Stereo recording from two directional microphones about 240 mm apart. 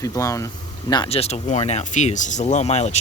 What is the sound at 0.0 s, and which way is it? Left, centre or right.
Speech, centre.